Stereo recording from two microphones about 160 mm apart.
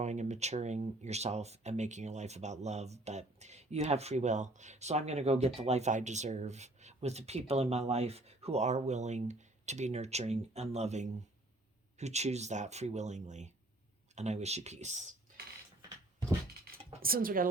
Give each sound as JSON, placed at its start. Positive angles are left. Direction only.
{"t": 0.0, "sound": "speech", "side_deg": -45}
{"t": 17.0, "sound": "speech", "side_deg": -65}